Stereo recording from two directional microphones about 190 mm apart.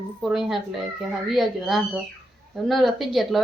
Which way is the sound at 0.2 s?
Centre (ahead or behind).